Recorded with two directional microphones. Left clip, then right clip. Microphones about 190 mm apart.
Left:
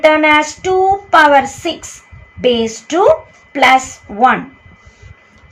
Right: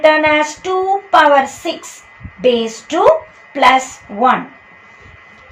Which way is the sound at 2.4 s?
25° left (ahead or behind).